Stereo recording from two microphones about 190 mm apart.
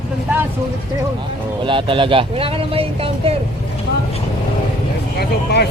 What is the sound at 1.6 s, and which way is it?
Speech, 25° right (ahead or behind).